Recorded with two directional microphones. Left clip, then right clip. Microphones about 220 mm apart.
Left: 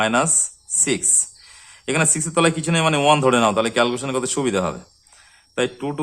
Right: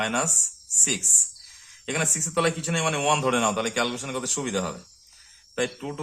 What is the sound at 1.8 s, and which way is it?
Speech, 25° left (ahead or behind).